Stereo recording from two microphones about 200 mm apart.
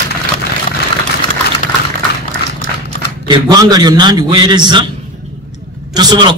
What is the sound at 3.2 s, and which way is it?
A man's voice, 20° right (ahead or behind).